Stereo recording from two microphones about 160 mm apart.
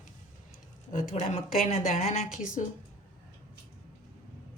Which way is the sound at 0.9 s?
55° left (ahead or behind).